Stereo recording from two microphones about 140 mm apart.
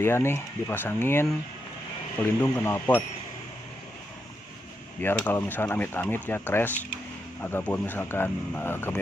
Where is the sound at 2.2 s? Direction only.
15° left (ahead or behind).